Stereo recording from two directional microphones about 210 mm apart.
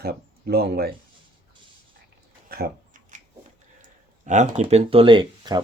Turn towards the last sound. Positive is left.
turn(degrees=-20)  # may be behind; listen again after turning